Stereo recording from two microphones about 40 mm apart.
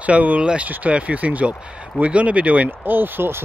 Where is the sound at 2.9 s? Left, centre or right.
Right.